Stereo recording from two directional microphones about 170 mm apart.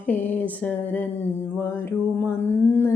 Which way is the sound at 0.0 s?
10° left (ahead or behind).